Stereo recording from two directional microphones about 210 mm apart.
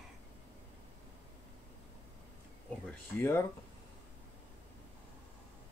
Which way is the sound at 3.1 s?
10° left (ahead or behind).